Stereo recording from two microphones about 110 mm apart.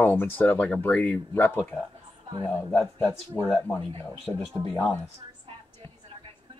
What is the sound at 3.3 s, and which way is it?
Speech, 15° left (ahead or behind).